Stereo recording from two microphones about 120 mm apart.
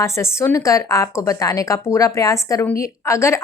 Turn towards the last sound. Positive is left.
turn(degrees=25)  # may be behind; listen again after turning